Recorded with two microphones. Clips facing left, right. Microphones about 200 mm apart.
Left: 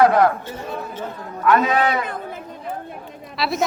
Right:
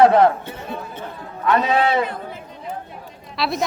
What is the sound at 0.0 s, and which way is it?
Speech, 25° right (ahead or behind).